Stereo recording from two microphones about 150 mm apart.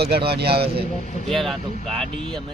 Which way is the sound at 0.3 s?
90° right.